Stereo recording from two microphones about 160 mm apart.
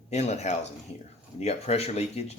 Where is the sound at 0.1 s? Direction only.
45° left (ahead or behind).